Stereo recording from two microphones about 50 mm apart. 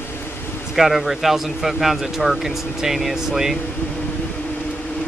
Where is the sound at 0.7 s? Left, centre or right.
Centre.